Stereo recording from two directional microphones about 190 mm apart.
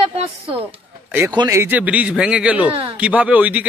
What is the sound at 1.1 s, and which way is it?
Speech, 15° right (ahead or behind).